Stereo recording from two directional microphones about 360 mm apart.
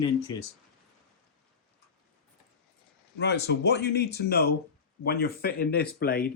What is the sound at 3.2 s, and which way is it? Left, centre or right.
Speech, left.